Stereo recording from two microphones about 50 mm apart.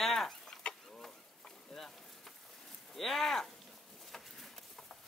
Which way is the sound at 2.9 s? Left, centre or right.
Centre.